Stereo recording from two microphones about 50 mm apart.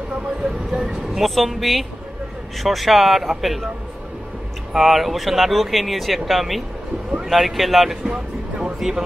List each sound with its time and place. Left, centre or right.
0.4 s speech: centre
1.1 s speech: centre
4.7 s speech: centre
8.1 s a sound: right
8.7 s speech: centre